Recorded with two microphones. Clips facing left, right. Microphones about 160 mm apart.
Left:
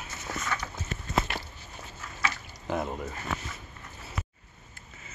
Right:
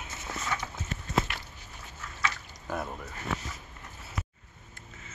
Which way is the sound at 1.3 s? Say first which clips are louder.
Left 5 dB; 30° left (ahead or behind).